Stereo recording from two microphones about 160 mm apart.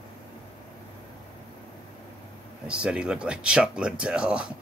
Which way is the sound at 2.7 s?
5° right (ahead or behind).